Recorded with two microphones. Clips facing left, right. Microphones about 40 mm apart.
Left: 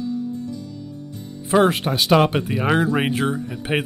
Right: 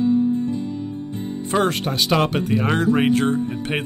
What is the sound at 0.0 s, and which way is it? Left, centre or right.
Music, right.